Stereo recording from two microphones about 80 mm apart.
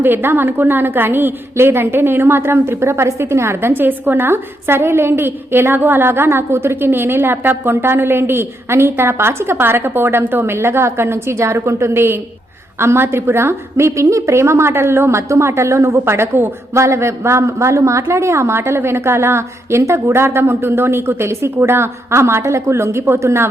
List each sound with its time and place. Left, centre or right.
0.0 s a woman's voice: right